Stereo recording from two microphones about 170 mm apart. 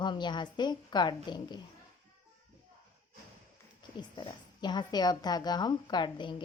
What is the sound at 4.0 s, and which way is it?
A woman's voice, 25° left (ahead or behind).